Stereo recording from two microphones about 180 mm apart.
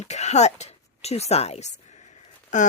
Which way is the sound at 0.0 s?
40° left (ahead or behind).